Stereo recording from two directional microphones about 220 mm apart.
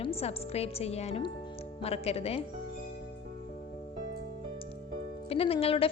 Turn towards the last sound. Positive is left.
turn(degrees=25)  # may be behind; listen again after turning